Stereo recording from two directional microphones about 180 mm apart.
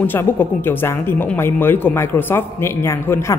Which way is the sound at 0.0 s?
10° left (ahead or behind).